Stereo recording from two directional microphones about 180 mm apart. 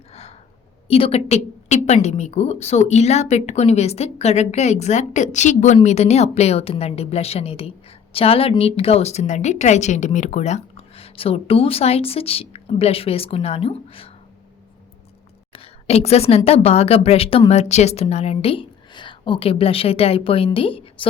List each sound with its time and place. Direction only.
0.1 s a sound: 35° left (ahead or behind)
0.9 s a woman's voice: 30° left (ahead or behind)
15.5 s a woman's voice: 35° left (ahead or behind)